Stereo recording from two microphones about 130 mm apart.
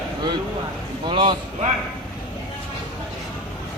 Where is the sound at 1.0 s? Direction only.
35° right (ahead or behind).